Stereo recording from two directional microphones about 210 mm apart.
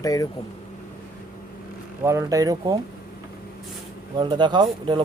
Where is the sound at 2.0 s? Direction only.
15° right (ahead or behind).